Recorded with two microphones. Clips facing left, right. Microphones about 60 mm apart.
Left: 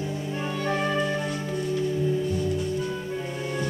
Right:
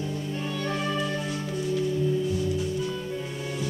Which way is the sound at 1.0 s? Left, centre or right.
Centre.